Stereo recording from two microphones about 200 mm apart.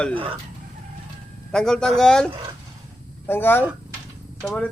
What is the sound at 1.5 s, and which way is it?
Speech, 5° left (ahead or behind).